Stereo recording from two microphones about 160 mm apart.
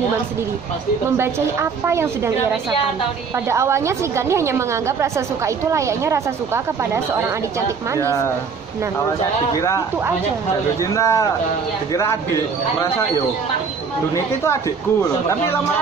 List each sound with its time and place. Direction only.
1.1 s a woman's voice: 15° right (ahead or behind)
3.4 s a woman's voice: 15° right (ahead or behind)
11.0 s speech: 20° left (ahead or behind)
14.1 s speech: 15° left (ahead or behind)